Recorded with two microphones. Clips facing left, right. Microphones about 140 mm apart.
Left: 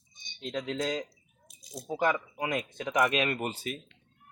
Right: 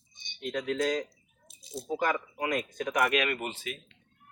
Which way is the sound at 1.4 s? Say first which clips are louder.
Right 4 dB; 30° right (ahead or behind).